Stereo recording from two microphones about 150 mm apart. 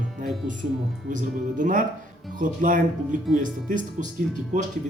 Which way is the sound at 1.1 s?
60° right (ahead or behind).